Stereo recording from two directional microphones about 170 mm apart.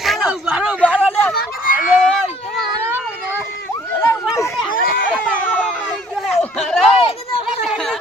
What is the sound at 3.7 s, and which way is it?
Chatter, 15° left (ahead or behind).